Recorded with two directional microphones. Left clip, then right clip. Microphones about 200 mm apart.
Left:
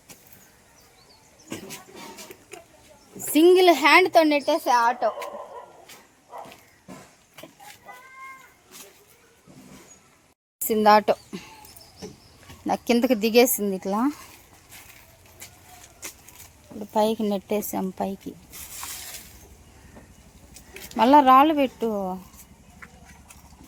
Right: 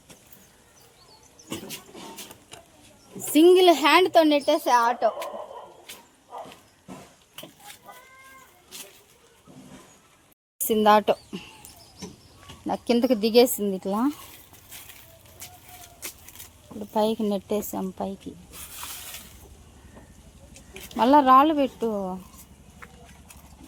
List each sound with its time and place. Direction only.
3.3 s speech: 10° left (ahead or behind)
10.7 s speech: centre (ahead or behind)
12.6 s speech: 15° left (ahead or behind)
16.0 s a sound: 40° right (ahead or behind)
16.7 s speech: 5° left (ahead or behind)
20.9 s speech: 15° left (ahead or behind)
22.8 s a sound: 30° right (ahead or behind)